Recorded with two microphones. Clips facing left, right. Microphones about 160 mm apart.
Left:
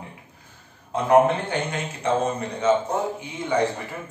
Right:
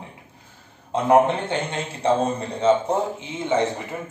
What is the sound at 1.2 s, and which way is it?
A man's voice, 25° right (ahead or behind).